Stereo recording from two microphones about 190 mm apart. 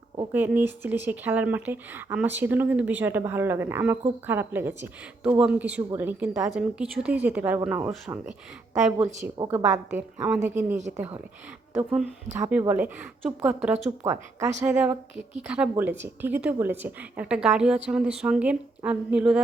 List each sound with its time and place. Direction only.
0.3 s a woman's voice: 10° right (ahead or behind)
9.4 s a woman's voice: 20° right (ahead or behind)
14.0 s a woman's voice: 15° right (ahead or behind)